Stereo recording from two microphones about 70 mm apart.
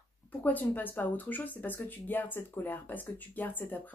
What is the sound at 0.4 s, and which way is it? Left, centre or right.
Speech, left.